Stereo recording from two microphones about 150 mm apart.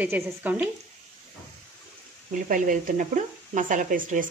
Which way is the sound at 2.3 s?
65° right (ahead or behind).